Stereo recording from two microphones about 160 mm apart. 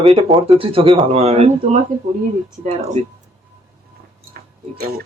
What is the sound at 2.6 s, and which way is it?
Speech, 45° right (ahead or behind).